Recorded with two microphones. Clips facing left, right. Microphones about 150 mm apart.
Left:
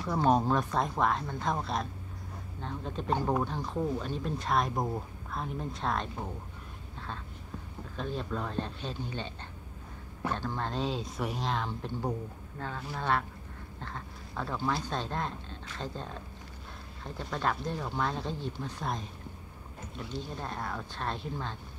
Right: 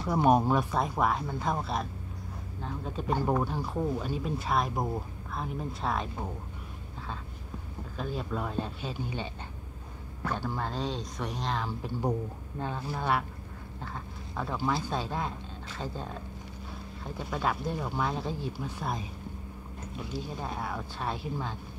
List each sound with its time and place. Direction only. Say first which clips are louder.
0.1 s speech: right 2 dB; 10° right (ahead or behind)
8.0 s speech: right 1 dB; 5° right (ahead or behind)
10.3 s speech: right 1 dB; 5° right (ahead or behind)
12.5 s speech: right 3 dB; 15° right (ahead or behind)